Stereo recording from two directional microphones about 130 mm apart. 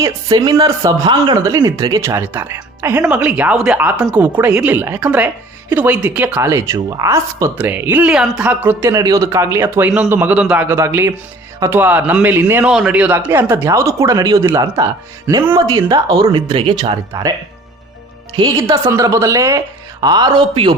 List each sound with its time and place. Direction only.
0.0 s speech: 30° right (ahead or behind); by 6.5 s 15° right (ahead or behind)
6.5 s speech: 25° right (ahead or behind)
7.6 s a woman's voice: 15° right (ahead or behind); by 17.2 s 40° right (ahead or behind)
18.9 s speech: 25° right (ahead or behind)